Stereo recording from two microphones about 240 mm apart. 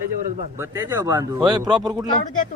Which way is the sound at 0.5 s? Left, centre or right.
Centre.